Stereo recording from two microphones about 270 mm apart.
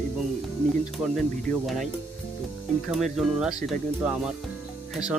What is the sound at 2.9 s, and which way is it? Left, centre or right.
Speech, centre.